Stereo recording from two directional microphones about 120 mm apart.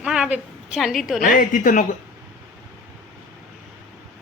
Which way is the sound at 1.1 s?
90° left.